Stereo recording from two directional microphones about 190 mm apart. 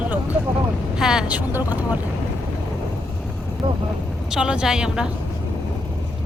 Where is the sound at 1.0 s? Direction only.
5° right (ahead or behind).